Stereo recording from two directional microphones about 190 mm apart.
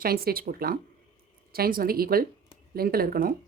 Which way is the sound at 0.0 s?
50° right (ahead or behind).